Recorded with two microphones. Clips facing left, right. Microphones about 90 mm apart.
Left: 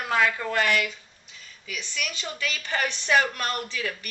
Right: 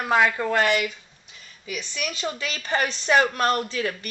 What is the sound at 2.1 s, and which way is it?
Speech, 35° right (ahead or behind).